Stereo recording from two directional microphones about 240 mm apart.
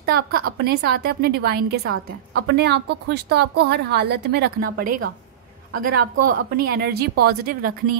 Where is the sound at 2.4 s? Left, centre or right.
Right.